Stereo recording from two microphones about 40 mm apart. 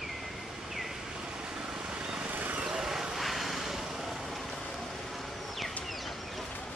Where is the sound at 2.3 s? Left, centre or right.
Right.